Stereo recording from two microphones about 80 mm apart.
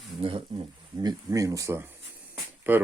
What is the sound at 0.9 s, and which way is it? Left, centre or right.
Speech, right.